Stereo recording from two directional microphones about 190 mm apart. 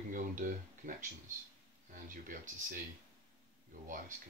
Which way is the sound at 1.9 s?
45° right (ahead or behind).